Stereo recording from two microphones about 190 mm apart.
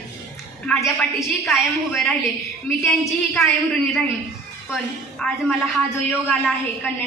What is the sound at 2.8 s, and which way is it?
Speech, 15° left (ahead or behind).